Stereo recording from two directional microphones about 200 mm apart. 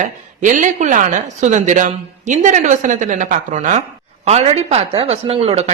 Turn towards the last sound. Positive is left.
turn(degrees=-30)  # may be behind; listen again after turning